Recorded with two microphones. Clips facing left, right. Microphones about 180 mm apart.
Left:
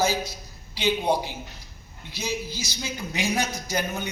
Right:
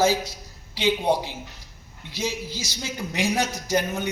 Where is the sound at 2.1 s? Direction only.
90° right.